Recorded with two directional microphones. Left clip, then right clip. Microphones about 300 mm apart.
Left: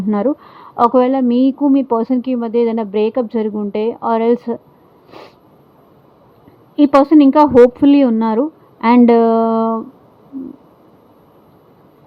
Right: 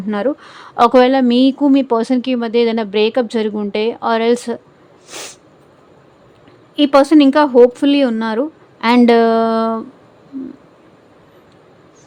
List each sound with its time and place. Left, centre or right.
0.1 s speech: centre
5.0 s a sound: centre
6.7 s speech: centre